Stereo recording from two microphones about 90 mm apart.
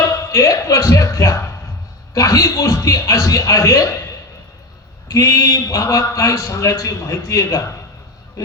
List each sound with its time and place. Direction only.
0.1 s a man's voice: 35° left (ahead or behind)
5.0 s a man's voice: 35° left (ahead or behind)